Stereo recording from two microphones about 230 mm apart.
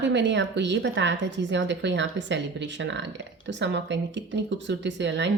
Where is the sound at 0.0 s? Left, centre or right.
Right.